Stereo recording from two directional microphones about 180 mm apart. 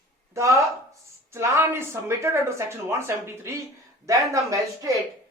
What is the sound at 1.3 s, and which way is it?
Speech, 15° right (ahead or behind).